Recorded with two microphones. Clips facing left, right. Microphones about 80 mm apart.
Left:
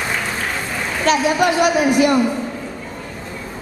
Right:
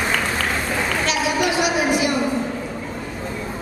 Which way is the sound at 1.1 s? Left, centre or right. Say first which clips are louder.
Left 9 dB; left.